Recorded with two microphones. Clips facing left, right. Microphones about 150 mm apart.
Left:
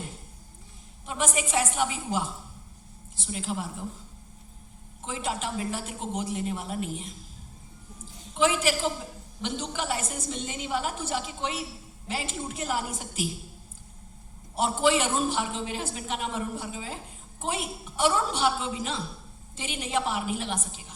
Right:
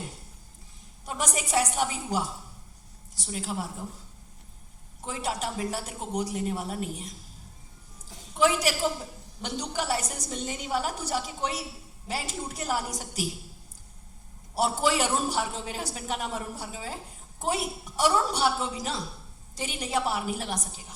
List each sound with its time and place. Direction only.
1.0 s a man's voice: 40° right (ahead or behind)
5.0 s a man's voice: 40° right (ahead or behind)
8.4 s a man's voice: 40° right (ahead or behind)
14.5 s a man's voice: 40° right (ahead or behind)